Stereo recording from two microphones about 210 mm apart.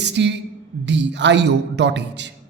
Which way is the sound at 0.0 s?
55° right (ahead or behind).